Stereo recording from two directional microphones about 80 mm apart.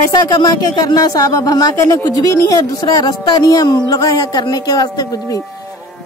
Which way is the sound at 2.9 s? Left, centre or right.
Left.